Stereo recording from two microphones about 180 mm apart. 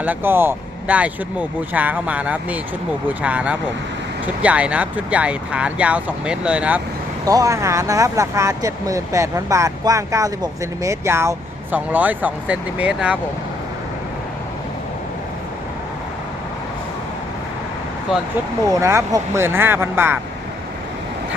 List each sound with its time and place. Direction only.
0.0 s speech: 10° right (ahead or behind)
7.3 s speech: 20° right (ahead or behind)
18.7 s speech: 15° right (ahead or behind)